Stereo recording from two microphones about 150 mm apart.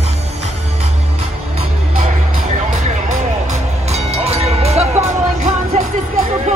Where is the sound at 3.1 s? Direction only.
50° right (ahead or behind).